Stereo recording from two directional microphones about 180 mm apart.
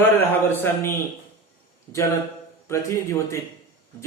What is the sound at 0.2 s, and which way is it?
Speech, 10° left (ahead or behind).